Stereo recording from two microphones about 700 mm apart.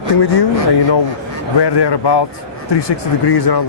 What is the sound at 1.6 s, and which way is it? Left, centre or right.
Speech, left.